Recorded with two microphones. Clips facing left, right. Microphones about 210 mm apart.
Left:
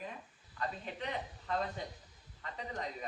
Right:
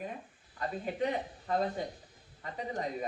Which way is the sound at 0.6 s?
40° right (ahead or behind).